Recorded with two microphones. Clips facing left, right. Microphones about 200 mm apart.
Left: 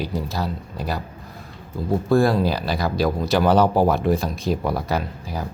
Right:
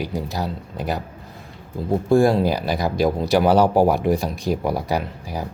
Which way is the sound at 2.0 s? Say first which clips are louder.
Right 2 dB; 15° right (ahead or behind).